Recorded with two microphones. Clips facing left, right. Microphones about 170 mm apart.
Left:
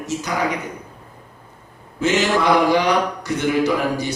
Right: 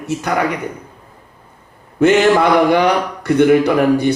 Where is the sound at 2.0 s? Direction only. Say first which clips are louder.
Right 7 dB; 60° right (ahead or behind).